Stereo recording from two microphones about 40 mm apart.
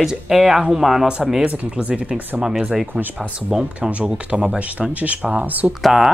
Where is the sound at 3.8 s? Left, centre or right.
Right.